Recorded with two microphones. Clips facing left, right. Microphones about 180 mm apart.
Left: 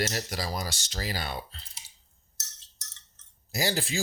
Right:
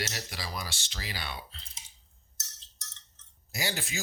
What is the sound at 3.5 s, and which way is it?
Speech, 35° left (ahead or behind).